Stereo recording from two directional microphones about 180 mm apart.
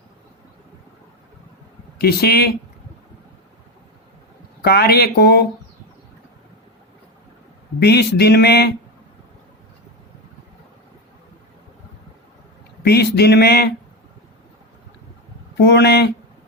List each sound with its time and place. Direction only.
2.0 s speech: 60° left (ahead or behind)
4.6 s speech: 60° left (ahead or behind)
7.8 s speech: 65° left (ahead or behind)
12.8 s speech: 65° left (ahead or behind)
15.5 s speech: 65° left (ahead or behind)